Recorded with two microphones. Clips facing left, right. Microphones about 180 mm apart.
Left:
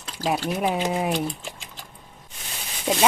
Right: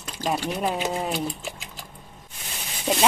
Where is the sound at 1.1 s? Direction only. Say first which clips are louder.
Left 2 dB; 5° right (ahead or behind).